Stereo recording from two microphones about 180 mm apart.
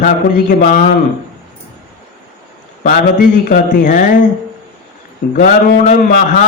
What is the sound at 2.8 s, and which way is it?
Mantra, 45° left (ahead or behind).